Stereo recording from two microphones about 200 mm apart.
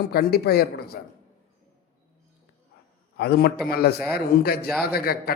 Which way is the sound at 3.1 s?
50° left (ahead or behind).